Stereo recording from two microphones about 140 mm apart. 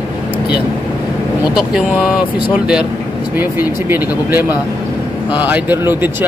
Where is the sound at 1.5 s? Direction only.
5° right (ahead or behind).